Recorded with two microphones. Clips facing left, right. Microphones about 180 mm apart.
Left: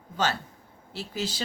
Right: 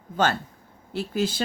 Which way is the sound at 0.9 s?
55° right (ahead or behind).